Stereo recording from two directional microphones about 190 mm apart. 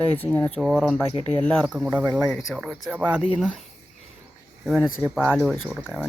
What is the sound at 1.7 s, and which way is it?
Speech, 5° right (ahead or behind).